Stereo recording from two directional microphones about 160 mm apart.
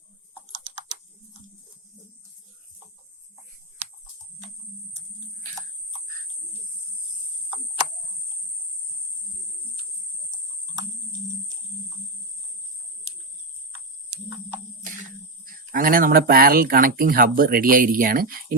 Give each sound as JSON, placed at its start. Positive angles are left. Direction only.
{"t": 15.4, "sound": "speech", "side_deg": -60}